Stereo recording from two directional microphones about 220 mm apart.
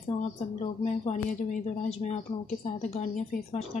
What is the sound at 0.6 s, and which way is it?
Speech, 30° left (ahead or behind).